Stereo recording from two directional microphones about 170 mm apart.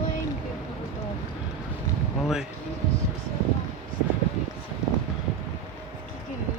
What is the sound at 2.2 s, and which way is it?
Basketball bounce, 5° right (ahead or behind).